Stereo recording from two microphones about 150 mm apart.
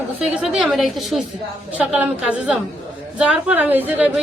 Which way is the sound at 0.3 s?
5° right (ahead or behind).